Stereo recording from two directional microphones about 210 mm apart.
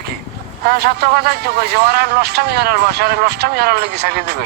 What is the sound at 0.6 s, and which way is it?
A man's voice, 50° right (ahead or behind).